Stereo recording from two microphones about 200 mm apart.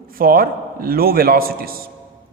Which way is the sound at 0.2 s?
45° right (ahead or behind).